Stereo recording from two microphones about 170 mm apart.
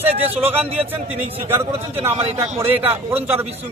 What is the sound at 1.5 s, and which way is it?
A man's voice, 15° right (ahead or behind).